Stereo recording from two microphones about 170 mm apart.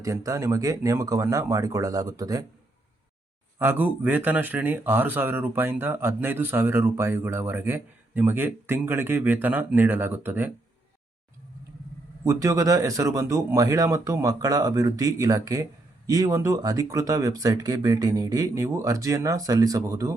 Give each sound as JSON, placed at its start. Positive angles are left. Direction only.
{"t": 0.0, "sound": "speech", "side_deg": -20}
{"t": 3.6, "sound": "speech", "side_deg": -10}
{"t": 12.2, "sound": "speech", "side_deg": -20}